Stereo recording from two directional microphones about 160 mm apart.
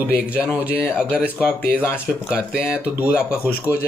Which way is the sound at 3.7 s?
20° left (ahead or behind).